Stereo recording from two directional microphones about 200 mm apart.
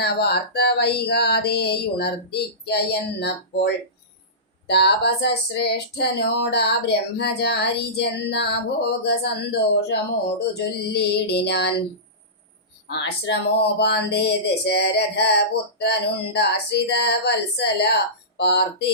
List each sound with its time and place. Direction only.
0.0 s speech: 55° left (ahead or behind)
12.9 s speech: 60° left (ahead or behind)